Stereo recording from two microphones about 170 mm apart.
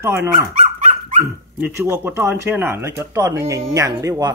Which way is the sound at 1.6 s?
15° right (ahead or behind).